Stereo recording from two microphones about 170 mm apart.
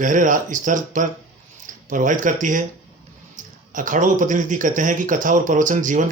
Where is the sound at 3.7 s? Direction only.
50° right (ahead or behind).